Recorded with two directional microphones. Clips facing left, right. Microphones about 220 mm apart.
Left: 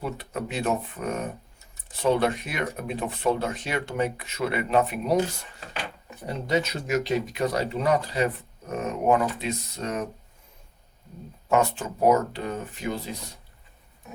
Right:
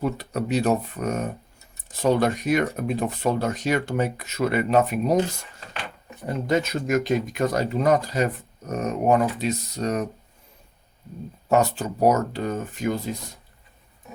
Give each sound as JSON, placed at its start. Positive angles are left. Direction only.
{"t": 0.0, "sound": "speech", "side_deg": -40}
{"t": 6.2, "sound": "speech", "side_deg": -50}
{"t": 11.4, "sound": "speech", "side_deg": -40}